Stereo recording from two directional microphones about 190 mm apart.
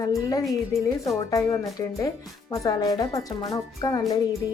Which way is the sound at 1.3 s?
15° left (ahead or behind).